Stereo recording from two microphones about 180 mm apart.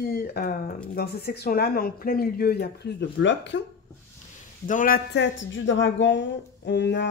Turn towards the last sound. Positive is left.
turn(degrees=70)  # may be behind; listen again after turning